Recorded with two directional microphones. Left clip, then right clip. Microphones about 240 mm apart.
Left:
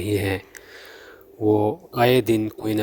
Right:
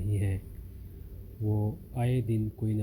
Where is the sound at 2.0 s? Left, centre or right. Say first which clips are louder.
Left 16 dB; left.